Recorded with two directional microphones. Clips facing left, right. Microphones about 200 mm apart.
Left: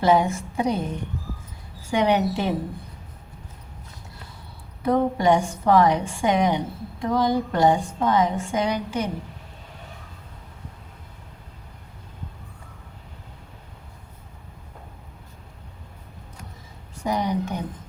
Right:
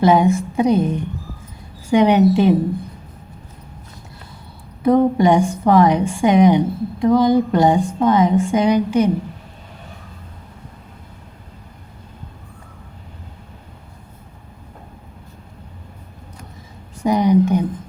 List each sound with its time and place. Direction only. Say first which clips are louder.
0.0 s a woman's voice: right 6 dB; 15° right (ahead or behind)
4.8 s a woman's voice: right 7 dB; 15° right (ahead or behind)
17.0 s a woman's voice: right 10 dB; 15° right (ahead or behind)